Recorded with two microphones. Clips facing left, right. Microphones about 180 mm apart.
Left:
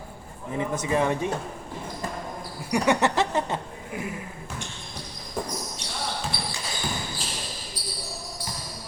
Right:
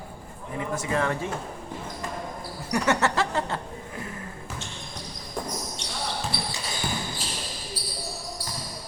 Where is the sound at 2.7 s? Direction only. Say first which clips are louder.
Left 2 dB; 15° left (ahead or behind).